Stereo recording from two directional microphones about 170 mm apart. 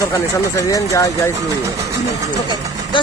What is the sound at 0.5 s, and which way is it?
Speech, 20° left (ahead or behind).